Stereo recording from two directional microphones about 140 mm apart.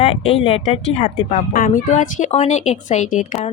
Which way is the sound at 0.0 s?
45° left (ahead or behind).